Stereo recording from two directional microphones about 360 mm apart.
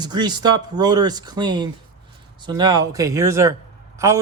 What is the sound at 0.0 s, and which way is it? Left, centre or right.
A man's voice, centre.